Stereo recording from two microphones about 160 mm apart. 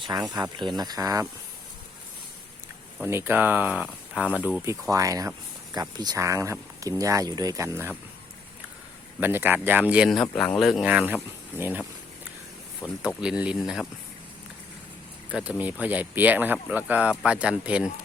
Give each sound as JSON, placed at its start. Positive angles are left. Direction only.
{"t": 0.0, "sound": "speech", "side_deg": -25}
{"t": 3.1, "sound": "speech", "side_deg": -15}
{"t": 9.2, "sound": "speech", "side_deg": -15}
{"t": 12.8, "sound": "speech", "side_deg": -5}
{"t": 15.3, "sound": "speech", "side_deg": -5}